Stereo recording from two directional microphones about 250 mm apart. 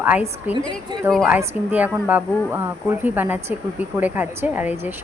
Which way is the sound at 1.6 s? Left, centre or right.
Left.